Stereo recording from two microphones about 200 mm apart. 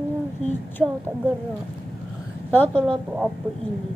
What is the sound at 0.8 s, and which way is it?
Speech, 5° right (ahead or behind).